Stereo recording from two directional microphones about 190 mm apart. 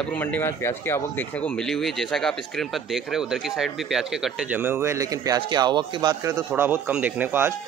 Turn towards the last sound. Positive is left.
turn(degrees=-10)  # may be behind; listen again after turning